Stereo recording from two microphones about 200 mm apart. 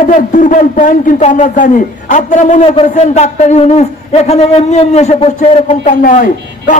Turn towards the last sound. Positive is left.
turn(degrees=40)  # may be behind; listen again after turning